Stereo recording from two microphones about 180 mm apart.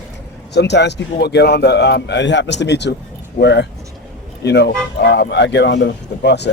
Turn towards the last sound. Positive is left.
turn(degrees=70)  # may be behind; listen again after turning